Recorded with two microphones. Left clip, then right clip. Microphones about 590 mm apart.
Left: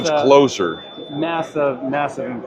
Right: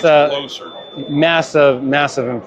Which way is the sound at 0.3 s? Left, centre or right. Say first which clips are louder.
Left 9 dB; left.